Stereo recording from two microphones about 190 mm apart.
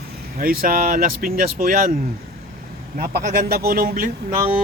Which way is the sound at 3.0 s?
55° right (ahead or behind).